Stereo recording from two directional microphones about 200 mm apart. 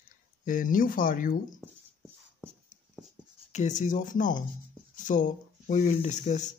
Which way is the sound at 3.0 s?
5° right (ahead or behind).